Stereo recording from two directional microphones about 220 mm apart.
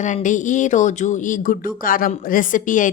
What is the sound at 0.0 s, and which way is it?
Speech, 35° left (ahead or behind).